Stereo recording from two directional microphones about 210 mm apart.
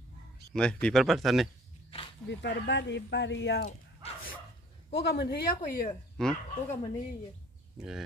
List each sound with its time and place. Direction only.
0.6 s speech: 5° left (ahead or behind)
2.2 s speech: 55° left (ahead or behind)
3.6 s a sound: 35° left (ahead or behind)
4.9 s speech: 55° left (ahead or behind)
6.1 s speech: 5° left (ahead or behind)